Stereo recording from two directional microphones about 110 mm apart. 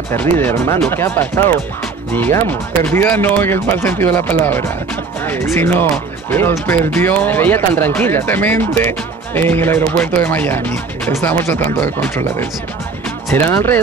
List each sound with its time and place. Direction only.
0.1 s speech: 20° left (ahead or behind)
2.9 s speech: 20° left (ahead or behind)
13.3 s speech: 25° left (ahead or behind)